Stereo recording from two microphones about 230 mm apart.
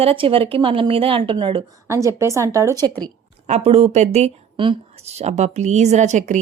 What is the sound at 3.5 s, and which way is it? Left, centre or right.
Speech, right.